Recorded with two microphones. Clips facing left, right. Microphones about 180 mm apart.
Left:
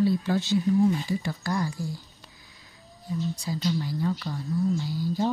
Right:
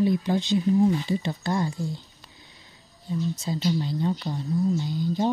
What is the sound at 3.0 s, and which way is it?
Speech, 25° right (ahead or behind).